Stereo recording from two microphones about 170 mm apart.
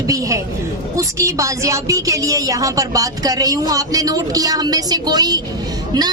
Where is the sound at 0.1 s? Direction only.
20° right (ahead or behind).